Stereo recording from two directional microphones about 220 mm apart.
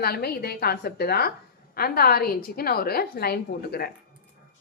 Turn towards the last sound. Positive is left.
turn(degrees=45)  # may be behind; listen again after turning